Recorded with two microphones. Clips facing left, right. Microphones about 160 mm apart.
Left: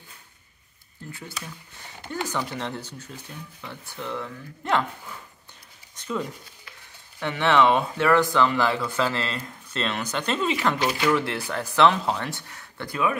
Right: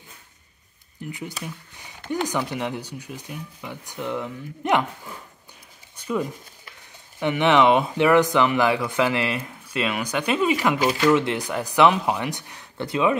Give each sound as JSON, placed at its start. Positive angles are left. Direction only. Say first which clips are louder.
{"t": 1.0, "sound": "speech", "louder": "right 5 dB", "side_deg": -15}
{"t": 5.9, "sound": "a sound", "louder": "right 4 dB", "side_deg": -10}
{"t": 7.2, "sound": "speech", "louder": "right 2 dB", "side_deg": -15}